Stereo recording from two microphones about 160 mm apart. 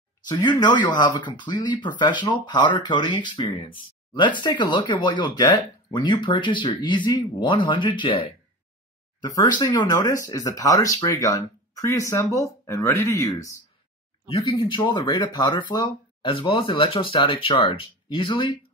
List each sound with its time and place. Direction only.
0.3 s speech: 25° left (ahead or behind)